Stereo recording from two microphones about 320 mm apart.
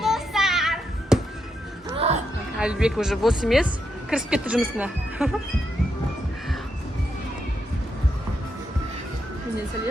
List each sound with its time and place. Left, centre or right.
0.0 s child singing: centre
2.0 s a sound: centre
2.6 s speech: centre